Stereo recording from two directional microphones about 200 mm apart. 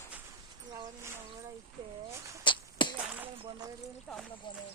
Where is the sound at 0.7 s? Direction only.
15° right (ahead or behind).